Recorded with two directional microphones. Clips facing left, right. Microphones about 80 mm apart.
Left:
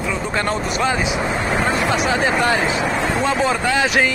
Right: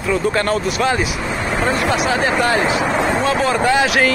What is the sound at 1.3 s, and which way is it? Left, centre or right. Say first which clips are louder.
Vehicle: right 2 dB; centre.